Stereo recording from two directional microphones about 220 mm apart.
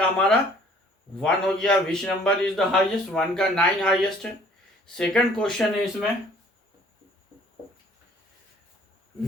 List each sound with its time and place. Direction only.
0.0 s a man's voice: 5° left (ahead or behind)